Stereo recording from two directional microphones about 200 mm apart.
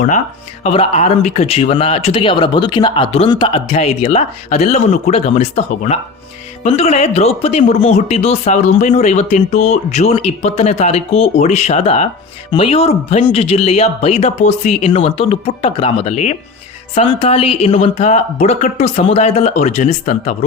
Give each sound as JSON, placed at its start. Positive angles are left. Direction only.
{"t": 0.6, "sound": "speech", "side_deg": 30}